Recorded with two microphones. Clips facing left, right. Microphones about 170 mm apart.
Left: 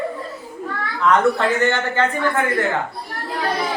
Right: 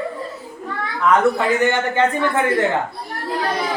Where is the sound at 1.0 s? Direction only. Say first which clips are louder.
Even; 10° right (ahead or behind).